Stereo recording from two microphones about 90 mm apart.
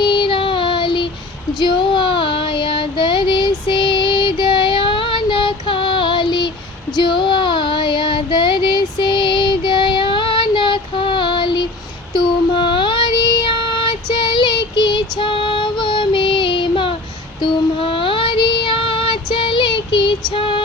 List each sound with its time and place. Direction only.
0.0 s child singing: 60° left (ahead or behind)
14.1 s female singing: 60° left (ahead or behind)
17.4 s child singing: 80° left; by 20.1 s 65° left (ahead or behind)
20.3 s female singing: 80° left